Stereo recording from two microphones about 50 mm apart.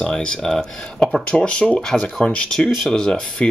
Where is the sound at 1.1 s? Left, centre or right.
Left.